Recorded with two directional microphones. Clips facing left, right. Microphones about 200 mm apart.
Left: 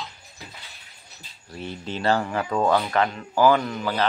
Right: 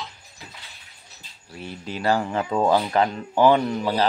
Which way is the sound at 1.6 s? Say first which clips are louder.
Left 1 dB; 5° right (ahead or behind).